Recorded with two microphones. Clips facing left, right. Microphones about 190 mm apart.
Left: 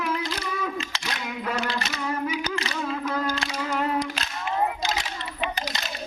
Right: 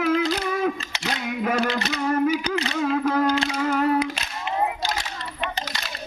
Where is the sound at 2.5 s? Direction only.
65° right (ahead or behind).